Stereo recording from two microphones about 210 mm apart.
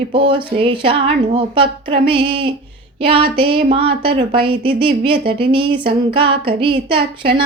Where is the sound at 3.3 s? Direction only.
25° right (ahead or behind).